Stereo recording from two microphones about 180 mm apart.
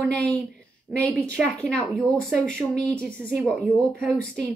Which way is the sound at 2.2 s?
Centre (ahead or behind).